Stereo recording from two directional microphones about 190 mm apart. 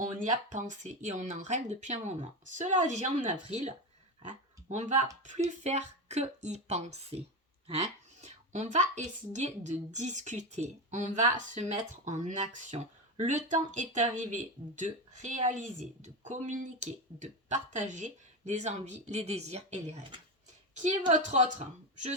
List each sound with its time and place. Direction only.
0.0 s a woman's voice: 40° right (ahead or behind)
8.2 s a woman's voice: 40° right (ahead or behind)
21.1 s a woman's voice: 40° right (ahead or behind)